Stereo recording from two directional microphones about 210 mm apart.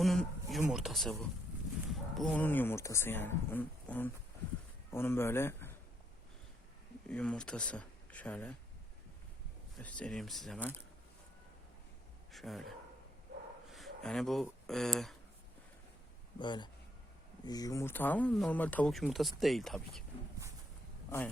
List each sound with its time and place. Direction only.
0.0 s a sound: centre (ahead or behind)
0.6 s speech: 5° right (ahead or behind)
7.1 s speech: 5° left (ahead or behind)
9.7 s speech: 5° left (ahead or behind)
12.3 s speech: centre (ahead or behind)
16.4 s a man's voice: 20° left (ahead or behind); by 20.1 s centre (ahead or behind)